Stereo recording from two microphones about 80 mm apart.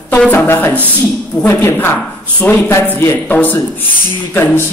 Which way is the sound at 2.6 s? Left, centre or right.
Left.